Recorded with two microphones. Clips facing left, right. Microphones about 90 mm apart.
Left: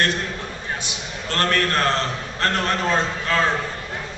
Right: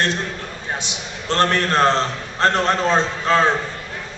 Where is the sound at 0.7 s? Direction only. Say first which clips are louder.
Right 1 dB; 25° right (ahead or behind).